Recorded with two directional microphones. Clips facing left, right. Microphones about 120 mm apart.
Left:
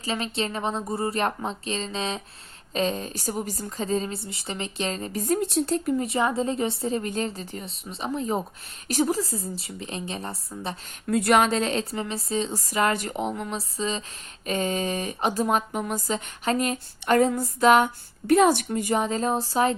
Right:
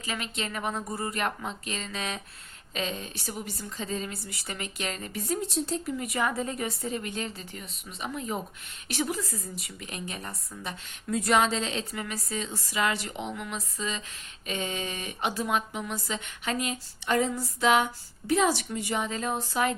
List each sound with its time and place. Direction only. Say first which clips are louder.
0.0 s speech: left 6 dB; 30° left (ahead or behind)
2.7 s a woman's voice: left 7 dB; 35° left (ahead or behind)
5.2 s speech: left 6 dB; 55° left (ahead or behind)
6.0 s a woman's voice: left 5 dB; 25° left (ahead or behind)
11.0 s speech: left 4 dB; 60° left (ahead or behind)
11.9 s a woman's voice: left 6 dB; 30° left (ahead or behind)